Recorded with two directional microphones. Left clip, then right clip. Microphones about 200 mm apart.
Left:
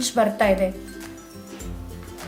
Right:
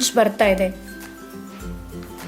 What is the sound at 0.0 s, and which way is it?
Speech, 40° right (ahead or behind).